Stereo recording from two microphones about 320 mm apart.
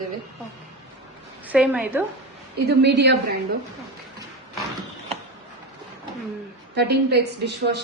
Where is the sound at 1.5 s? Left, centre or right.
Centre.